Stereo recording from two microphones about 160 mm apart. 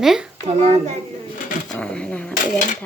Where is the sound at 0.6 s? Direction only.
40° right (ahead or behind).